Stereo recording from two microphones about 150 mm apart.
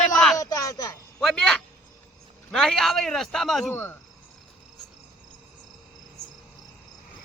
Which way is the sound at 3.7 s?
15° left (ahead or behind).